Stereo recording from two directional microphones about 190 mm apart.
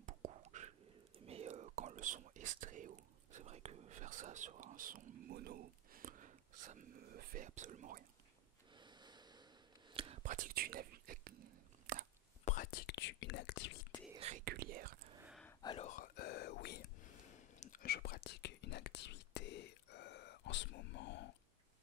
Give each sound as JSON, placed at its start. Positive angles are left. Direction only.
{"t": 0.0, "sound": "whispering", "side_deg": -40}
{"t": 8.7, "sound": "snort", "side_deg": -25}
{"t": 9.9, "sound": "whispering", "side_deg": -30}
{"t": 10.2, "sound": "whispering", "side_deg": -45}
{"t": 11.9, "sound": "a sound", "side_deg": -70}
{"t": 12.7, "sound": "whispering", "side_deg": 65}
{"t": 14.1, "sound": "whispering", "side_deg": -35}
{"t": 14.4, "sound": "speech", "side_deg": -55}
{"t": 15.6, "sound": "speech", "side_deg": 25}
{"t": 15.9, "sound": "whispering", "side_deg": 50}
{"t": 17.6, "sound": "whispering", "side_deg": 45}